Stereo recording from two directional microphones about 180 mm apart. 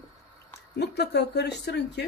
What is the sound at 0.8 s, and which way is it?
Speech, 70° left (ahead or behind).